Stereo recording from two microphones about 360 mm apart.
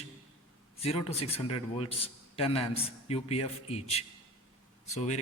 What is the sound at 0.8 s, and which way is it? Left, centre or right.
A man's voice, centre.